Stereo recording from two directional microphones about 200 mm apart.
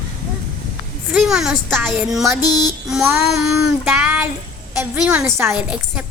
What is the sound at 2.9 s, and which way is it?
Child singing, 5° right (ahead or behind).